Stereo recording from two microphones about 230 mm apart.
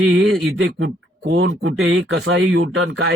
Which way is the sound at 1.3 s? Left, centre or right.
Right.